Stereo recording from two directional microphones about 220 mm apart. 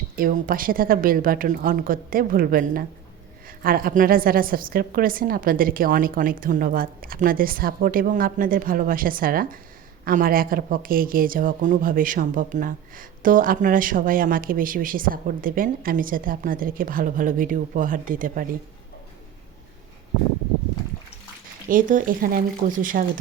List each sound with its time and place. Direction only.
0.2 s speech: 40° right (ahead or behind)
21.7 s speech: 35° right (ahead or behind)